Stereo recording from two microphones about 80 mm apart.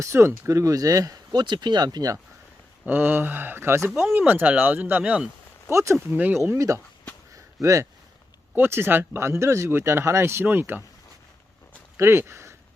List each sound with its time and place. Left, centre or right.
0.0 s speech: right
1.3 s speech: right
2.8 s speech: right
5.7 s speech: right
7.3 s a sound: right
8.5 s speech: right
11.9 s speech: right